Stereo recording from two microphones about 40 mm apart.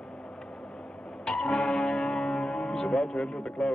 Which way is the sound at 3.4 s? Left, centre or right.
Centre.